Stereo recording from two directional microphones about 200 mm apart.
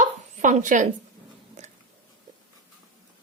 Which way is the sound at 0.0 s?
40° right (ahead or behind).